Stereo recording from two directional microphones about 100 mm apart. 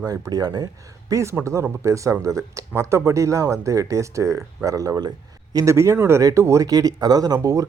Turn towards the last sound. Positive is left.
turn(degrees=-35)  # may be behind; listen again after turning